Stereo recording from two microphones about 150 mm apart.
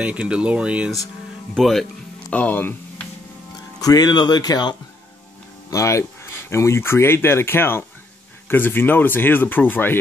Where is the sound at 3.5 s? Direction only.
25° left (ahead or behind).